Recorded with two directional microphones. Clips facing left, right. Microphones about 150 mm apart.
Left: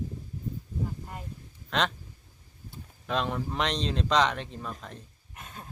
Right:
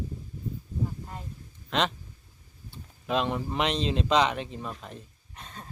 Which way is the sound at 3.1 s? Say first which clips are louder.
Right 2 dB; 5° right (ahead or behind).